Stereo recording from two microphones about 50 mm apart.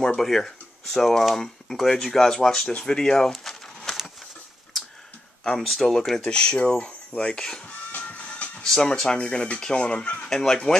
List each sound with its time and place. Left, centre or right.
0.0 s speech: centre
2.8 s a sound: centre
5.4 s speech: centre
6.2 s speech: centre
7.6 s music: left
8.6 s speech: centre